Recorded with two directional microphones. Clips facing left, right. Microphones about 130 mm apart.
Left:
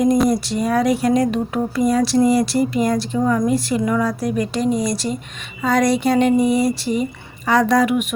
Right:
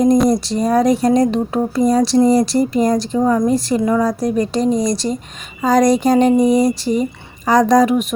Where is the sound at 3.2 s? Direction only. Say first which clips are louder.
Right 3 dB; 25° right (ahead or behind).